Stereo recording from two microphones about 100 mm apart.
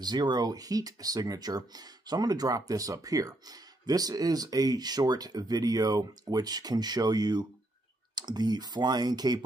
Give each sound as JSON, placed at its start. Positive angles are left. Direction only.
{"t": 0.0, "sound": "speech", "side_deg": -45}